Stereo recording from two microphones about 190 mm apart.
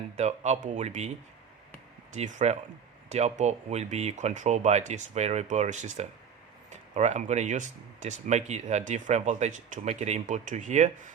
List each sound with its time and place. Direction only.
0.2 s speech: 35° right (ahead or behind)
2.1 s speech: 40° right (ahead or behind)